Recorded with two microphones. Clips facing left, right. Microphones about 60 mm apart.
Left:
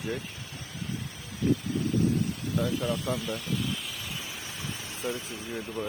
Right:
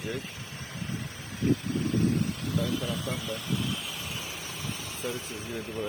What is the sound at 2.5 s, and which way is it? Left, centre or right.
Speech, left.